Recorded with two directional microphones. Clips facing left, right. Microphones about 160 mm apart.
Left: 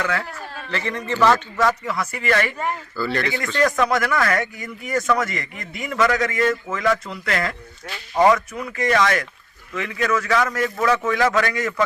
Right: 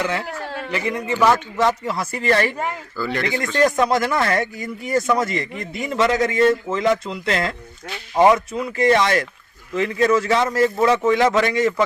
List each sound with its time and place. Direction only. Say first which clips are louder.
0.0 s speech: right 1 dB; 20° right (ahead or behind)
0.3 s a sound: right 6 dB; 90° right
0.7 s a man's voice: right 2 dB; 10° right (ahead or behind)
1.5 s a man's voice: right 1 dB; 25° right (ahead or behind)
3.0 s a man's voice: right 1 dB; 15° right (ahead or behind)
3.6 s speech: right 2 dB; 30° right (ahead or behind)